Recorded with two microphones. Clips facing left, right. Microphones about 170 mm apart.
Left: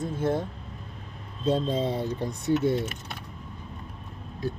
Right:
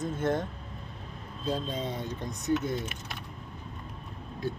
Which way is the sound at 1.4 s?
30° left (ahead or behind).